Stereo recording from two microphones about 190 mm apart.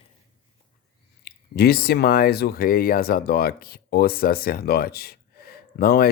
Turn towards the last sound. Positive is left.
turn(degrees=55)  # may be behind; listen again after turning